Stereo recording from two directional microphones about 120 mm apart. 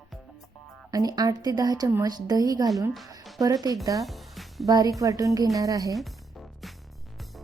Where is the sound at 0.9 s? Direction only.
30° right (ahead or behind).